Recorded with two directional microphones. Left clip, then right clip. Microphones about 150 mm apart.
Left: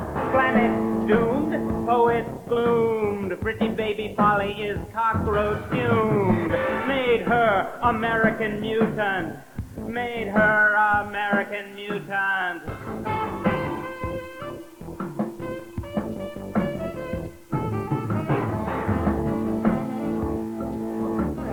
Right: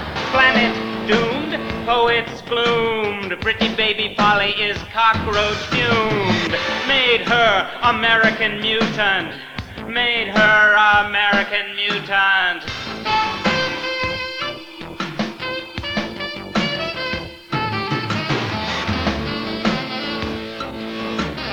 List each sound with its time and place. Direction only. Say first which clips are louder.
0.3 s music: right 6 dB; 40° left (ahead or behind)
16.5 s music: right 6 dB; 40° left (ahead or behind)